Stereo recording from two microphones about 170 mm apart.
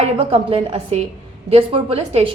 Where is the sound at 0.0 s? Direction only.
35° right (ahead or behind).